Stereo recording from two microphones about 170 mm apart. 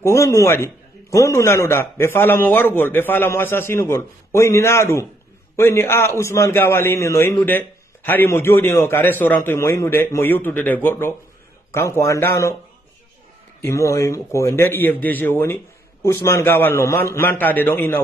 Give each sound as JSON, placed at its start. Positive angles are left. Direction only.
{"t": 0.0, "sound": "a man's voice", "side_deg": 15}
{"t": 13.6, "sound": "a man's voice", "side_deg": 15}